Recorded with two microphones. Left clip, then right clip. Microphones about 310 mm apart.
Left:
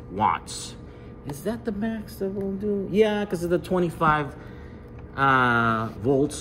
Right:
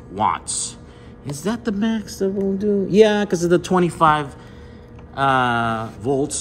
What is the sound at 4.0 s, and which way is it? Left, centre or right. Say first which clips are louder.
Speech: right 6 dB; centre.